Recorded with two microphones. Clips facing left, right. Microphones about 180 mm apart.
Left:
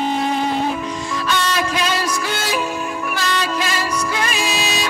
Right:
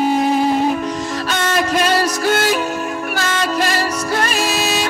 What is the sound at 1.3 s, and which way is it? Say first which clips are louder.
Music: right 4 dB; 50° right (ahead or behind).